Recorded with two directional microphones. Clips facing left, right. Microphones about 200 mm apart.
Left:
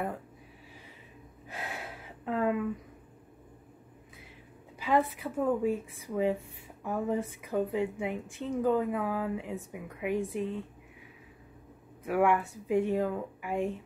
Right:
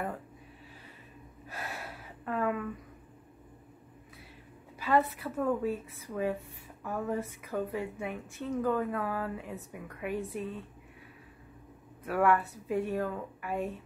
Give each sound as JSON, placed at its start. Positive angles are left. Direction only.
{"t": 1.5, "sound": "gasp", "side_deg": 15}
{"t": 2.2, "sound": "a sound", "side_deg": 20}
{"t": 4.7, "sound": "a woman's voice", "side_deg": 15}
{"t": 12.0, "sound": "a woman's voice", "side_deg": 10}